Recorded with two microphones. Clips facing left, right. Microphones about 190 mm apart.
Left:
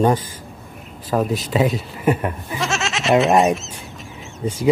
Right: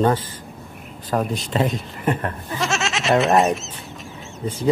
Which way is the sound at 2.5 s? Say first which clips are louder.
Right 2 dB; centre (ahead or behind).